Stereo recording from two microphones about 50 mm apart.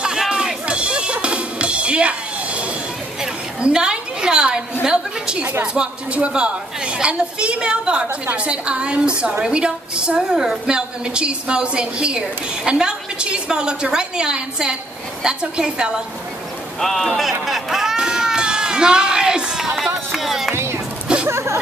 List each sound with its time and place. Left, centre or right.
0.0 s music: centre
3.6 s a woman's voice: centre
16.8 s speech: centre
17.9 s cat: centre
20.1 s a sound: centre
21.3 s a sound: right